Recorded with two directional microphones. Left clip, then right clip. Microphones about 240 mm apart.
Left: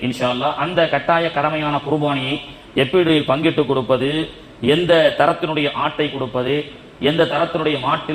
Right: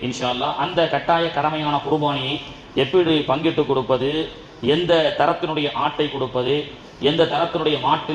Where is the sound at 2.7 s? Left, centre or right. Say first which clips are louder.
Left 2 dB; left.